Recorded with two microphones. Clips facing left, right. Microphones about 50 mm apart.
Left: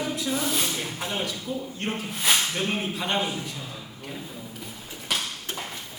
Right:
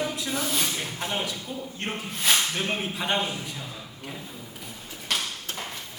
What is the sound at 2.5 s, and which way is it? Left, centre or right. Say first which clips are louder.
Speech: left 1 dB; centre.